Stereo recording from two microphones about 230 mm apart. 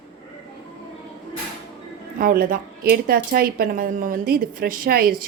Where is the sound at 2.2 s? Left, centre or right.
Right.